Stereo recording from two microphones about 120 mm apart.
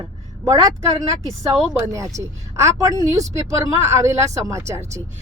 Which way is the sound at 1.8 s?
25° right (ahead or behind).